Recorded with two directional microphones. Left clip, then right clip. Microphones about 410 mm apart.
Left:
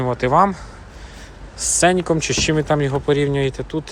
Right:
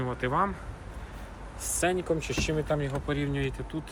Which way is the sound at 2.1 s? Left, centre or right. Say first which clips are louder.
Left 11 dB; centre.